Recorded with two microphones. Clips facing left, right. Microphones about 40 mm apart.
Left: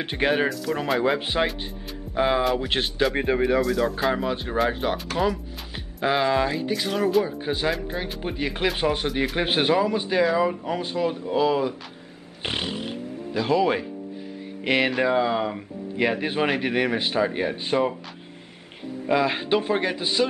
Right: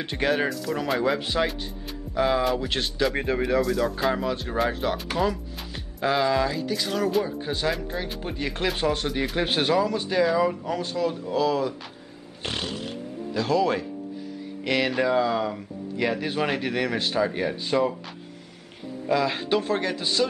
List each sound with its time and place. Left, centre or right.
0.0 s speech: left
0.5 s speech: centre
1.0 s speech: left
3.6 s speech: centre
4.1 s speech: centre
5.1 s music: centre
6.0 s speech: left
6.8 s speech: centre
12.4 s music: left
14.6 s speech: left
19.0 s speech: left